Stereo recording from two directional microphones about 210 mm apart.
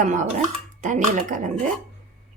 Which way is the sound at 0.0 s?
35° right (ahead or behind).